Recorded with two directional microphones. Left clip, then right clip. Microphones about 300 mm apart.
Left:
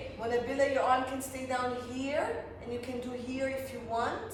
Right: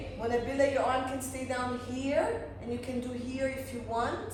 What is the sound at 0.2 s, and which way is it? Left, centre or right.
A man's voice, centre.